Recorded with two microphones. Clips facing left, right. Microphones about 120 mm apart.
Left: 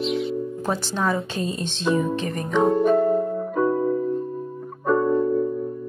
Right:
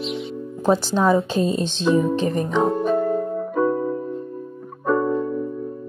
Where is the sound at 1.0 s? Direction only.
25° right (ahead or behind).